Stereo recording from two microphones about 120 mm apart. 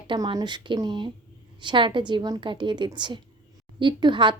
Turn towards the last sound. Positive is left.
turn(degrees=-40)  # may be behind; listen again after turning